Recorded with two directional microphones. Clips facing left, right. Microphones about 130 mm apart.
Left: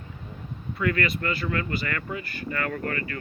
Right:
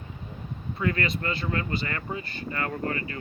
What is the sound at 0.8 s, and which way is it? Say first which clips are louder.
Speech: left 2 dB; 25° right (ahead or behind).